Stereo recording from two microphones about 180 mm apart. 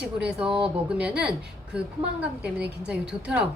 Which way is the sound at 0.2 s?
5° right (ahead or behind).